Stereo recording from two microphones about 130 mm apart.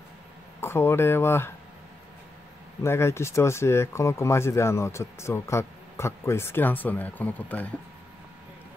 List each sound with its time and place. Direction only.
0.6 s speech: 20° left (ahead or behind)
2.8 s speech: 20° left (ahead or behind)